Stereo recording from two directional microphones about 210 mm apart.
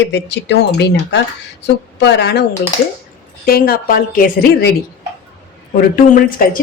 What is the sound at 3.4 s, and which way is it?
A woman's voice, 45° left (ahead or behind).